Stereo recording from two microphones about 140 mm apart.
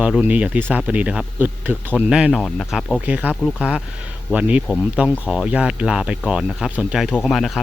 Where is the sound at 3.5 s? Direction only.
10° left (ahead or behind).